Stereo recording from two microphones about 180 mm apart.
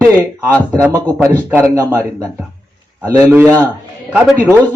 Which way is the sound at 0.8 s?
15° right (ahead or behind).